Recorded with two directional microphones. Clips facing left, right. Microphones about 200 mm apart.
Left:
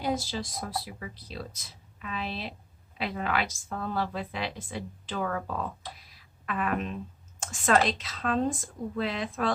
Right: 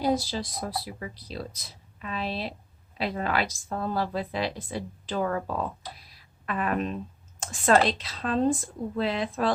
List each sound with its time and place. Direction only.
0.0 s a woman's voice: 35° right (ahead or behind)